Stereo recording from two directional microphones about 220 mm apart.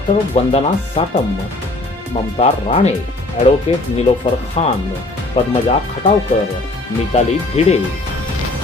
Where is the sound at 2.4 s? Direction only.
30° left (ahead or behind).